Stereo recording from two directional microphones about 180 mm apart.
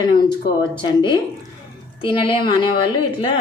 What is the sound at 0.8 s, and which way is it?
A woman's voice, 25° left (ahead or behind).